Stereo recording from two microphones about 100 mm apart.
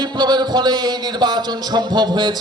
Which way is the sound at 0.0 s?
45° right (ahead or behind).